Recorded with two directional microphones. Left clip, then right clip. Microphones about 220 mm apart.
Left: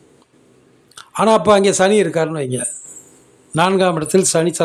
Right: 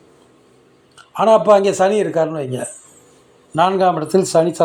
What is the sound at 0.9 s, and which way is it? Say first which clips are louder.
Speech: right 1 dB; 30° left (ahead or behind).